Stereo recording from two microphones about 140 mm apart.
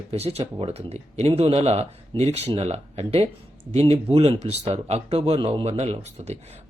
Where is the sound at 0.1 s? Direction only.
45° right (ahead or behind).